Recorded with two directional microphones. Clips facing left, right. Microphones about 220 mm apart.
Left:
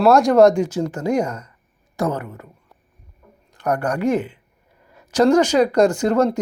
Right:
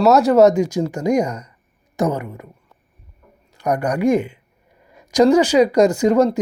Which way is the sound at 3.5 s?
10° right (ahead or behind).